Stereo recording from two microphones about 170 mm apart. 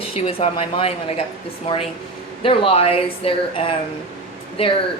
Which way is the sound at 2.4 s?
30° left (ahead or behind).